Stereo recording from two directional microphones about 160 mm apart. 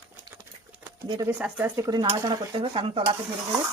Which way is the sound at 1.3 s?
10° right (ahead or behind).